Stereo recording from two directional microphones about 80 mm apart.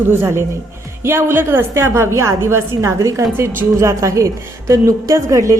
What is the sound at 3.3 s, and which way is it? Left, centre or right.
A woman's voice, right.